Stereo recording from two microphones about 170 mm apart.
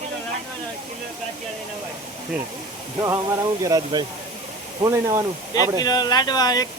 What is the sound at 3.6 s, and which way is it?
Speech, 20° right (ahead or behind).